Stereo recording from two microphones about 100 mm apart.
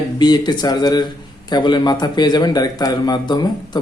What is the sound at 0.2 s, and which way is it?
A man's voice, 45° left (ahead or behind).